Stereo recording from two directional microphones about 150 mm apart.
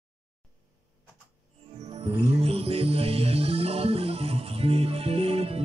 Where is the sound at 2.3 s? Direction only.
40° right (ahead or behind).